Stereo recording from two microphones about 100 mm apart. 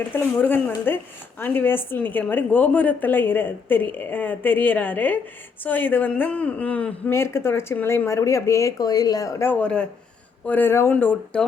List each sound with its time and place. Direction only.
0.3 s a man's voice: 20° left (ahead or behind)
7.1 s speech: 25° left (ahead or behind)
9.5 s a man's voice: 10° left (ahead or behind)